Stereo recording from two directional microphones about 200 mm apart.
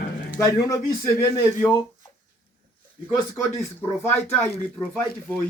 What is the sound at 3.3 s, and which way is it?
Speech, 10° left (ahead or behind).